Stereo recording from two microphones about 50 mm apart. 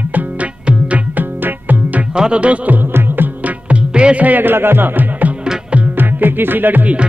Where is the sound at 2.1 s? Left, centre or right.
Centre.